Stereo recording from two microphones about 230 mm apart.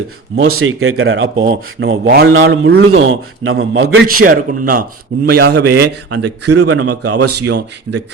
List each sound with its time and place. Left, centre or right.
0.3 s speech: right
3.1 s speech: right
4.0 s a man's voice: right
6.5 s speech: right
7.4 s a man's voice: right